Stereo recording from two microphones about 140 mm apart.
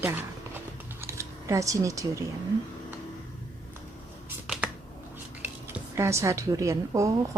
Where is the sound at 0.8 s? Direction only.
20° right (ahead or behind).